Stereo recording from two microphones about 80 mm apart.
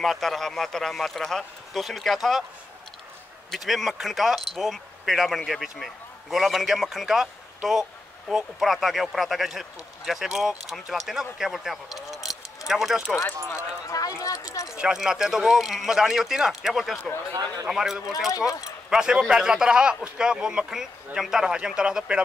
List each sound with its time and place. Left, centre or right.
0.0 s speech: centre
3.5 s speech: centre
13.5 s speech: left
14.7 s speech: centre
17.3 s a man's voice: right
17.6 s a man's voice: centre